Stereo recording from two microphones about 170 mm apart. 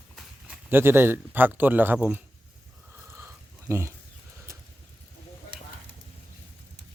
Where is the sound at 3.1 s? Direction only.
15° right (ahead or behind).